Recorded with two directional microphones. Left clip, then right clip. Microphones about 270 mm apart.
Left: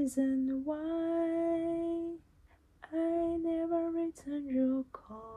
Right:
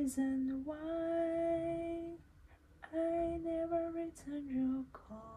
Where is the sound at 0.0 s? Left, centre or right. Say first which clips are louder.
Left 5 dB; centre.